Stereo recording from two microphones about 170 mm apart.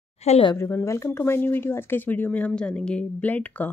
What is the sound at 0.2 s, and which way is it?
Speech, 40° left (ahead or behind).